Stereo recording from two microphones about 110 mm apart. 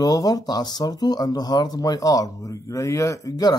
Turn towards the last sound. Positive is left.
turn(degrees=35)  # may be behind; listen again after turning